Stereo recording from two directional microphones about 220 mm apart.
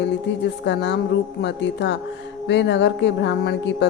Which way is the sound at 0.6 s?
50° left (ahead or behind).